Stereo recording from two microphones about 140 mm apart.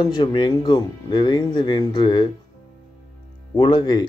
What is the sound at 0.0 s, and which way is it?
Speech, 30° left (ahead or behind).